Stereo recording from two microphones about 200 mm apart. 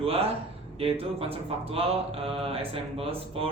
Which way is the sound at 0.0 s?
30° right (ahead or behind).